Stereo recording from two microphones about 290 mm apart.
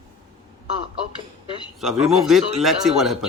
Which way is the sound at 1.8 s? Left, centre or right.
Centre.